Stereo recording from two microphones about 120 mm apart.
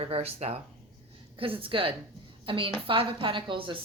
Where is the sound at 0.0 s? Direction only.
55° right (ahead or behind).